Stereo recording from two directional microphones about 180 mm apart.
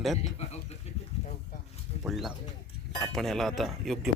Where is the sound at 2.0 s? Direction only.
Centre (ahead or behind).